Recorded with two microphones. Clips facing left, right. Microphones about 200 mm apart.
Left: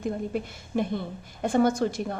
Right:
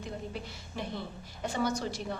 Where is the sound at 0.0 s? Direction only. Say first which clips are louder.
Left 10 dB; 50° left (ahead or behind).